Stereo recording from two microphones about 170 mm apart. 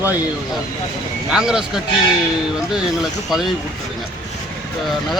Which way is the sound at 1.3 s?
5° right (ahead or behind).